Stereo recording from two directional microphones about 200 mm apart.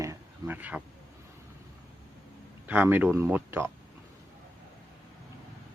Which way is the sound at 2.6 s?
10° right (ahead or behind).